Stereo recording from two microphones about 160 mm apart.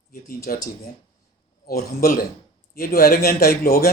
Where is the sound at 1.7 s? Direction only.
70° left (ahead or behind).